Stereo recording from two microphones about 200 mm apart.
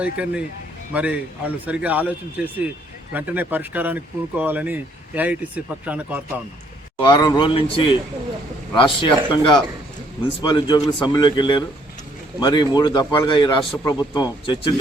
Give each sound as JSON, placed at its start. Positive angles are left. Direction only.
{"t": 0.0, "sound": "speech", "side_deg": -5}
{"t": 7.0, "sound": "speech", "side_deg": 20}